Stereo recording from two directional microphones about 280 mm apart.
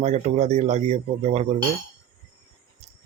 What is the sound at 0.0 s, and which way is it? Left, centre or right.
Speech, right.